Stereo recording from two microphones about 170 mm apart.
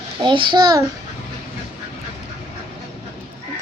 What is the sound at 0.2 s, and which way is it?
Speech, 25° right (ahead or behind).